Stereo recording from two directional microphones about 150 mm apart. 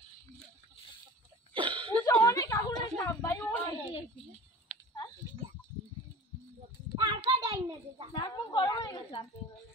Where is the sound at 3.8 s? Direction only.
40° left (ahead or behind).